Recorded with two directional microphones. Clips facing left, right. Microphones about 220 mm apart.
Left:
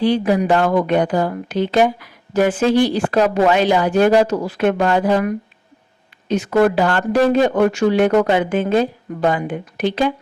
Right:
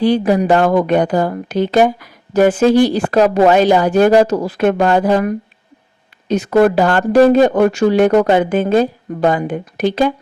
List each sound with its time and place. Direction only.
0.0 s speech: 40° right (ahead or behind)